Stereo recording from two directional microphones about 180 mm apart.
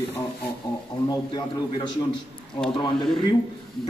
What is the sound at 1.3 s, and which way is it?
Speech, 25° left (ahead or behind).